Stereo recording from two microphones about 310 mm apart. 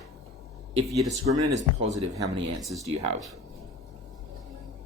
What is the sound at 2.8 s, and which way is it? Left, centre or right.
Speech, right.